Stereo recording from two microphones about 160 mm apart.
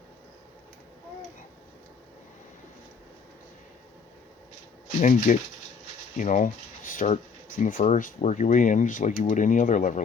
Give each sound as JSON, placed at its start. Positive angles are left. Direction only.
{"t": 4.9, "sound": "speech", "side_deg": 50}